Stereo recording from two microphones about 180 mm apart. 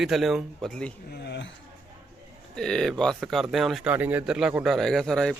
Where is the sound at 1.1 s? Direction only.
70° left (ahead or behind).